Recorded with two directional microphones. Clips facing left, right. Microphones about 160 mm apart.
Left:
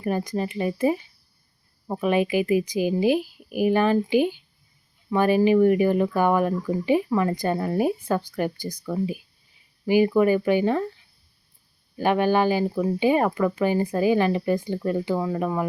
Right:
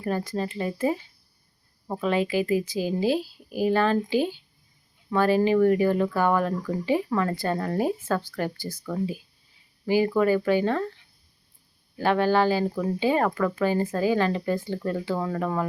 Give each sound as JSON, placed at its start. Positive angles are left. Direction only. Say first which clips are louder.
{"t": 0.0, "sound": "speech", "louder": "left 2 dB", "side_deg": 15}
{"t": 11.9, "sound": "speech", "louder": "left 1 dB", "side_deg": 15}